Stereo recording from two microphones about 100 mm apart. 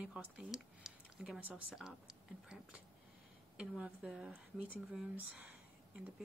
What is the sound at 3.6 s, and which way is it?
A woman's voice, 10° right (ahead or behind).